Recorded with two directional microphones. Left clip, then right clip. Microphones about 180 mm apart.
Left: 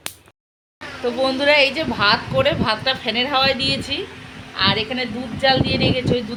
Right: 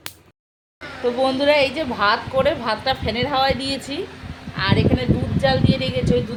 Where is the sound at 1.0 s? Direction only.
5° right (ahead or behind).